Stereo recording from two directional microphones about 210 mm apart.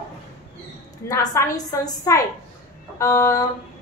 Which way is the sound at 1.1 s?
15° left (ahead or behind).